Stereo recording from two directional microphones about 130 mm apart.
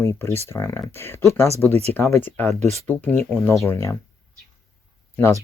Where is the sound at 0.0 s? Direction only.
20° left (ahead or behind).